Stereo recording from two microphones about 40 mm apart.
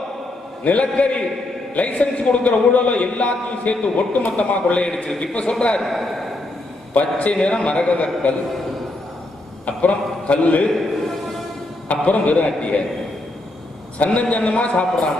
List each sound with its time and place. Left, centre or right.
0.7 s a man's voice: left
5.8 s a man's voice: centre
6.9 s a man's voice: left
9.7 s a man's voice: left
11.9 s a man's voice: left
12.4 s a man's voice: left
13.9 s a man's voice: left